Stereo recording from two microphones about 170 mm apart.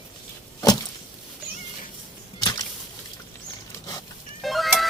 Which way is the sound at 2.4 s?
25° left (ahead or behind).